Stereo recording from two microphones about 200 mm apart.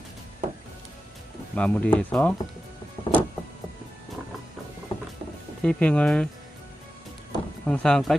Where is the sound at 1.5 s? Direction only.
5° left (ahead or behind).